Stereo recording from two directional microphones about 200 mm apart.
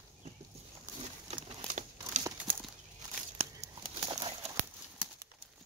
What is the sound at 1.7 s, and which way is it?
Crumpling, 35° right (ahead or behind).